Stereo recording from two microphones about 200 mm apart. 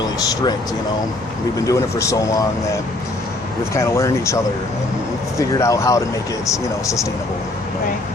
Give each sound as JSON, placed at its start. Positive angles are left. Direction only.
{"t": 0.0, "sound": "speech", "side_deg": 20}
{"t": 1.5, "sound": "speech", "side_deg": 15}
{"t": 3.8, "sound": "speech", "side_deg": 15}
{"t": 5.5, "sound": "speech", "side_deg": 15}